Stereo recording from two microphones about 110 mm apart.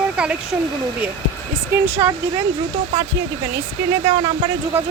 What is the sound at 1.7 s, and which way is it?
Speech, 20° right (ahead or behind).